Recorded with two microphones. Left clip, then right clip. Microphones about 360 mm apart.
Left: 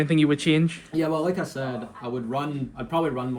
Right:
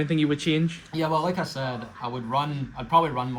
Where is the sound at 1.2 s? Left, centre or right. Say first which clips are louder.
Left 1 dB; centre.